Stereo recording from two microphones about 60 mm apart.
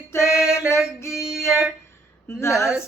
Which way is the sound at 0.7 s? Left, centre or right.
Left.